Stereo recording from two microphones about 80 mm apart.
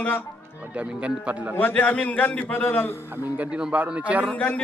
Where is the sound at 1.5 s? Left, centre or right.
Left.